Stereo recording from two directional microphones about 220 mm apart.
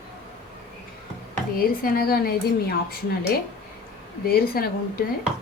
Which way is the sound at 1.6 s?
40° left (ahead or behind).